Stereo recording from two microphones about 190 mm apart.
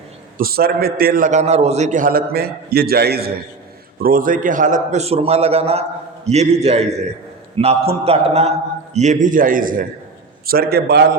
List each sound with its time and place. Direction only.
0.3 s a man's voice: 50° right (ahead or behind)